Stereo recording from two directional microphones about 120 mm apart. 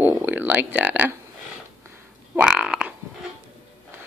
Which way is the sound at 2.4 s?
10° right (ahead or behind).